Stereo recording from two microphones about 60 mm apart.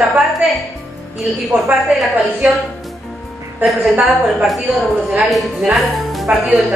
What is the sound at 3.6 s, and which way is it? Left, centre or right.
A woman's voice, centre.